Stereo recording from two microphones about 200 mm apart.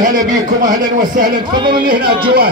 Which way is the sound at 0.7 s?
20° right (ahead or behind).